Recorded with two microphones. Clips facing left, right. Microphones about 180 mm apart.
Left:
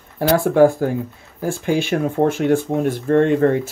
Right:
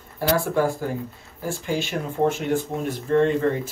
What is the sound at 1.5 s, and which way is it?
Speech, 55° left (ahead or behind).